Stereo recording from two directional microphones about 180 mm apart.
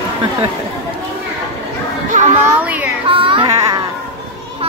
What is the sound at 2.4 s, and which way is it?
Speech, 10° right (ahead or behind).